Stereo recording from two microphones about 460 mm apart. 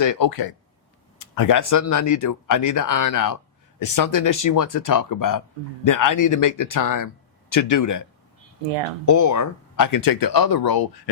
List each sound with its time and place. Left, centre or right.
0.0 s speech: left
9.0 s speech: left